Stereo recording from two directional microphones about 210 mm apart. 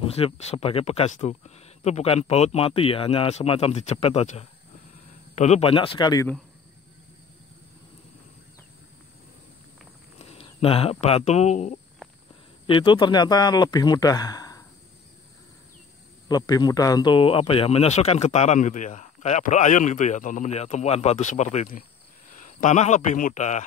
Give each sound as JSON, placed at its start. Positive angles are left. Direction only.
{"t": 0.0, "sound": "speech", "side_deg": 30}
{"t": 10.1, "sound": "speech", "side_deg": 30}
{"t": 16.3, "sound": "speech", "side_deg": 20}